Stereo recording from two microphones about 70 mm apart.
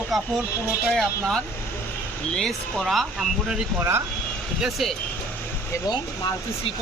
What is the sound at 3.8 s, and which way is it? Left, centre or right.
Speech, right.